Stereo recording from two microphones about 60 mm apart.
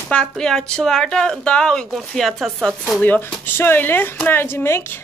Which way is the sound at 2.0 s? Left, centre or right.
Centre.